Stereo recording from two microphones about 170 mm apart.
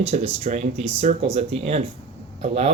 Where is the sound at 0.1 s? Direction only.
40° right (ahead or behind).